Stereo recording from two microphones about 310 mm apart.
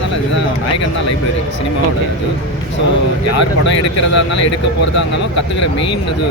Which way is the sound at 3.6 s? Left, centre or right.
Left.